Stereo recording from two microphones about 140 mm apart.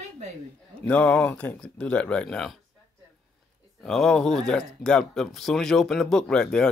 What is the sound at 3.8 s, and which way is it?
Speech, 5° left (ahead or behind).